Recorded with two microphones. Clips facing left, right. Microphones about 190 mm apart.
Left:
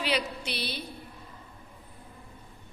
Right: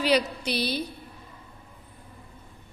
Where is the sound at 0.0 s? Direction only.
40° right (ahead or behind).